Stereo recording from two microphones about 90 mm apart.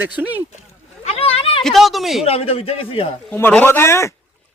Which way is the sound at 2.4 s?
90° left.